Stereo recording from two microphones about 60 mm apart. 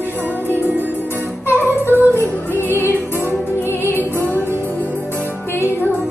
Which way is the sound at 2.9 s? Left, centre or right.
Left.